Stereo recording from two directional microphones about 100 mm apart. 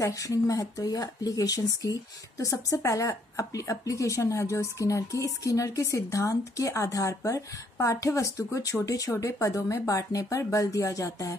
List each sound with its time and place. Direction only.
0.0 s speech: 35° left (ahead or behind)